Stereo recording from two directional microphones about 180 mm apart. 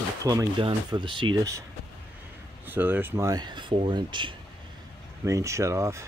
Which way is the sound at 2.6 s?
10° right (ahead or behind).